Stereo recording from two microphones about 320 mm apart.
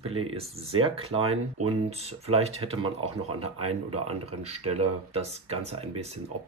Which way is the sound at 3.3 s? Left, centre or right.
Right.